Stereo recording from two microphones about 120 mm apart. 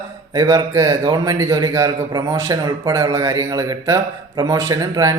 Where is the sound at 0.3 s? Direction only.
25° right (ahead or behind).